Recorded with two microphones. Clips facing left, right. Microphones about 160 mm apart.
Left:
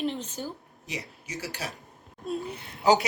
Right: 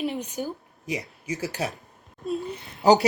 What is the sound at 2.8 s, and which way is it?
Speech, 35° right (ahead or behind).